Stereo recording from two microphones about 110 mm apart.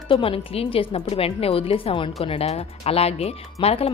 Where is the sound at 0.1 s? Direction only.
55° left (ahead or behind).